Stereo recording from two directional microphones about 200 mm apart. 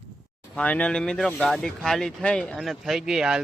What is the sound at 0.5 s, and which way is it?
A man's voice, 5° left (ahead or behind).